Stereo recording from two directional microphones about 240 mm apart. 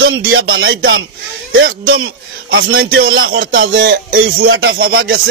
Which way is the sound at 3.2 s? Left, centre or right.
Right.